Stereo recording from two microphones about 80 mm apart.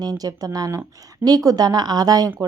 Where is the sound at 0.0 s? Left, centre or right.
Right.